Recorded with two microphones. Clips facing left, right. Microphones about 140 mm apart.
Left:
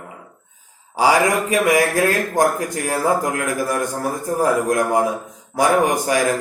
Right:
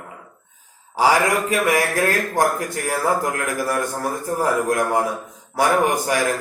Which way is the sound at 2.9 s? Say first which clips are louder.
Left 2 dB; 15° left (ahead or behind).